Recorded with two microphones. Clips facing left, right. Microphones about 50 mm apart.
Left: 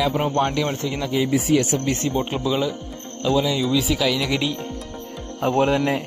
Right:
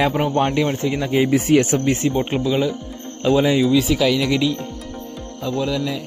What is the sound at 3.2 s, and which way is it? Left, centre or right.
Speech, right.